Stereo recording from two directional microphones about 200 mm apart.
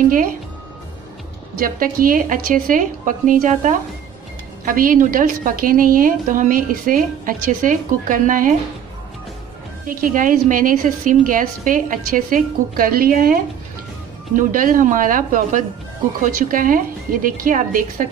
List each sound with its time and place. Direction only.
1.6 s a woman's voice: 45° right (ahead or behind)
9.8 s a woman's voice: 45° right (ahead or behind)